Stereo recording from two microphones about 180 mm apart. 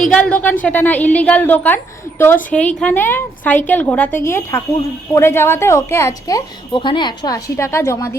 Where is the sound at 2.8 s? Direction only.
10° left (ahead or behind).